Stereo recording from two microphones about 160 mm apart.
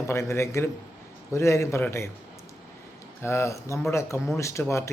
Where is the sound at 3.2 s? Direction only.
15° left (ahead or behind).